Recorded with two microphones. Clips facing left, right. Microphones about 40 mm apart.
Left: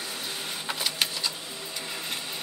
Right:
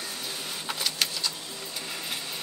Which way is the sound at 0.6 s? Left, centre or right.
Centre.